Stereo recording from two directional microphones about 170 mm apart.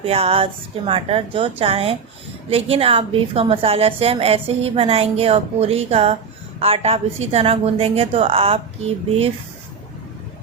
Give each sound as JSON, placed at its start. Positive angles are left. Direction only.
{"t": 0.0, "sound": "a woman's voice", "side_deg": -35}